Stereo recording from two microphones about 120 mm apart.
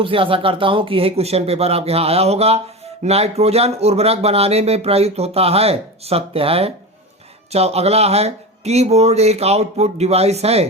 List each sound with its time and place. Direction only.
0.0 s speech: 45° right (ahead or behind)